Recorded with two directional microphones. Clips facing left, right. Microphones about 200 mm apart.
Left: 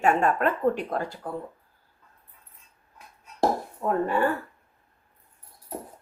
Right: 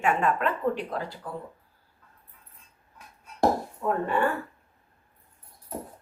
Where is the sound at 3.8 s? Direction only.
25° left (ahead or behind).